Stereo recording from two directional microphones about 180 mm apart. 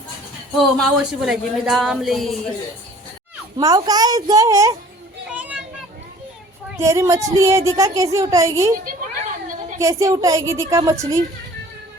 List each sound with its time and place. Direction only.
0.6 s a woman's voice: centre (ahead or behind)
3.6 s a woman's voice: 20° right (ahead or behind)
5.3 s children playing: 10° right (ahead or behind)
6.7 s speech: 15° right (ahead or behind)
9.7 s speech: 20° right (ahead or behind)